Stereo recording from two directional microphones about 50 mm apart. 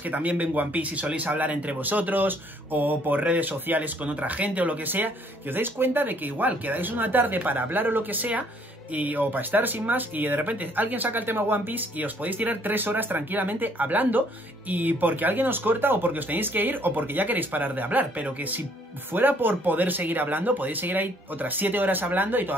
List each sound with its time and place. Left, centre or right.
0.0 s a man's voice: right